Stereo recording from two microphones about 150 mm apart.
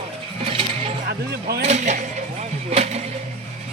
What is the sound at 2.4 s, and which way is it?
Vehicle, 45° right (ahead or behind).